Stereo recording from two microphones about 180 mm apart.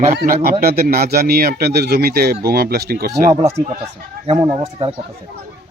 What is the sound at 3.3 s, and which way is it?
Speech, 35° right (ahead or behind).